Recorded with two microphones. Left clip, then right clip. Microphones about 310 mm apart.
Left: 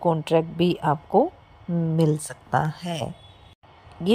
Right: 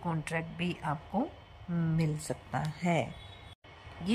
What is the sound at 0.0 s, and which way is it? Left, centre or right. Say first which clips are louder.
Speech: left 15 dB; left.